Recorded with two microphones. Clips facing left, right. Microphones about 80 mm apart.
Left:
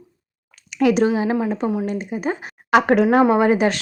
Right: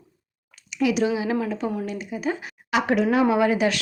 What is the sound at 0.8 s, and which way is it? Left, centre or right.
Speech, left.